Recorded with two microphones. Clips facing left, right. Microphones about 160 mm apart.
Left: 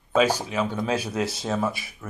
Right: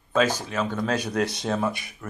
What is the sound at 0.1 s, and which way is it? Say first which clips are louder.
Speech: left 2 dB; 10° left (ahead or behind).